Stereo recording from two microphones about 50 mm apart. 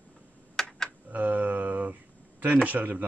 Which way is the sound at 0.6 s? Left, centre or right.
Centre.